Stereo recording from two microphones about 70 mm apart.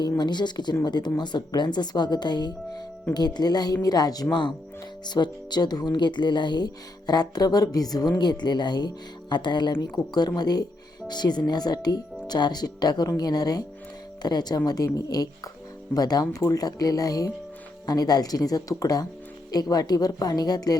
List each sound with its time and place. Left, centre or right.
0.2 s speech: left
7.1 s speech: left
8.2 s speech: left
11.1 s speech: left
14.2 s speech: left
16.3 s speech: left